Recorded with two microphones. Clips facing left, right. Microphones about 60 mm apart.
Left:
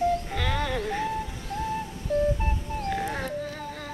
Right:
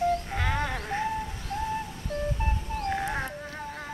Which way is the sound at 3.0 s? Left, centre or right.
Centre.